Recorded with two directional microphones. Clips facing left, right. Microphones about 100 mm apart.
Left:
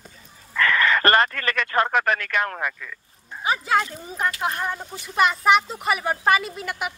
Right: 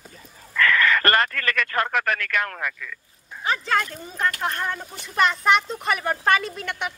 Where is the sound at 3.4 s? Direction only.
10° left (ahead or behind).